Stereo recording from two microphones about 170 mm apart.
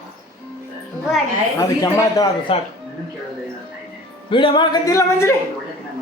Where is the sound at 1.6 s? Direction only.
20° left (ahead or behind).